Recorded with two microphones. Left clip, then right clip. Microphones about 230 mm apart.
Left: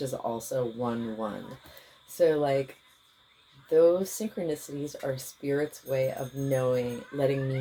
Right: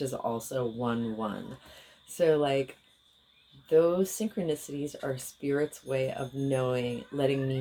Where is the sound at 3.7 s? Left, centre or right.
Right.